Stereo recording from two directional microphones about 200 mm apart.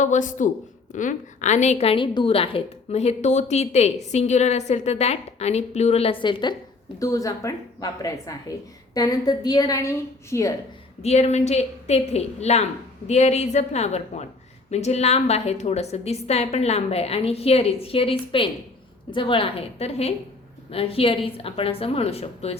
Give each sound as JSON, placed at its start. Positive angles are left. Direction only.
{"t": 0.0, "sound": "a woman's voice", "side_deg": 40}
{"t": 11.0, "sound": "a woman's voice", "side_deg": 35}